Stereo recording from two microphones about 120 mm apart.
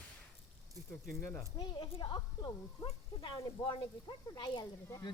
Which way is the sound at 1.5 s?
50° left (ahead or behind).